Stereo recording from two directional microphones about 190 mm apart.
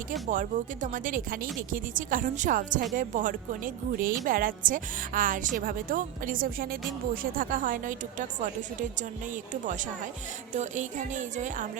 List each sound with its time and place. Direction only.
0.3 s a woman's voice: 45° right (ahead or behind)